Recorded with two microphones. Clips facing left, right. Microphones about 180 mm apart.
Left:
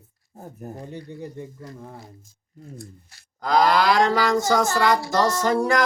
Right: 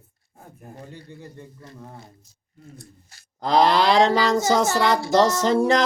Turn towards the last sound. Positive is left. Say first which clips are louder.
# right 2 dB
turn(degrees=-25)  # may be behind; listen again after turning